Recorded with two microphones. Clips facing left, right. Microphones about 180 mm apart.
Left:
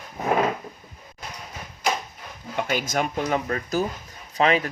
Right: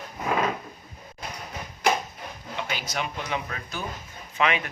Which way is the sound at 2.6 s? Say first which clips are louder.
Left 7 dB; 50° left (ahead or behind).